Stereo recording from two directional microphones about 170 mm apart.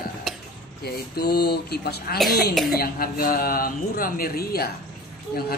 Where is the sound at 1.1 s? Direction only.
65° left (ahead or behind).